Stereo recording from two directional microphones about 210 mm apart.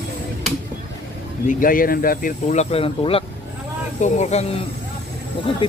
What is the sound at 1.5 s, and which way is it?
Speech, 40° left (ahead or behind).